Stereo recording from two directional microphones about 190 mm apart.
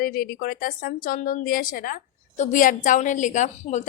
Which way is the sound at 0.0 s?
50° left (ahead or behind).